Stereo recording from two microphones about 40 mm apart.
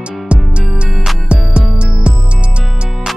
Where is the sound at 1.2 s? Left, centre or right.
Right.